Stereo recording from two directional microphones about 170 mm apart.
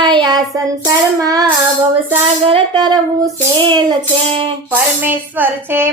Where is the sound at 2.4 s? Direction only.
30° right (ahead or behind).